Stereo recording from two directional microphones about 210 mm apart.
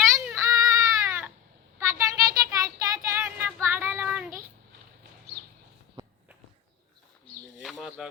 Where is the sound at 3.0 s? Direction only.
10° right (ahead or behind).